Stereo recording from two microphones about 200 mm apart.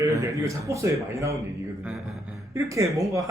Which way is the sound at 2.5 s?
15° right (ahead or behind).